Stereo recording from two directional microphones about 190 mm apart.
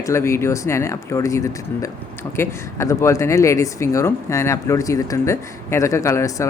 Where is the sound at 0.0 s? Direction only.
15° left (ahead or behind).